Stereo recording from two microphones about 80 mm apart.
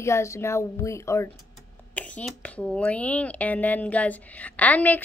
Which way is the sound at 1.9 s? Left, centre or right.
Centre.